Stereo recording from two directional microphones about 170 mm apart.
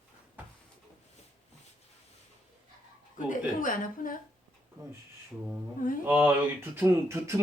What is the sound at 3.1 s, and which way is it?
Speech, 50° left (ahead or behind).